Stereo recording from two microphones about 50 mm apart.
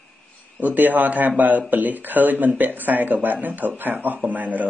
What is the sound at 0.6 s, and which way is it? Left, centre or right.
Speech, right.